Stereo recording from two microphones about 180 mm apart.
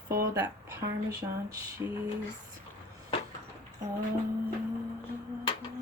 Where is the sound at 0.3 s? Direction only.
20° right (ahead or behind).